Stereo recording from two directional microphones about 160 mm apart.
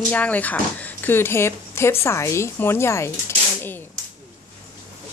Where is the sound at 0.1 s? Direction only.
10° left (ahead or behind).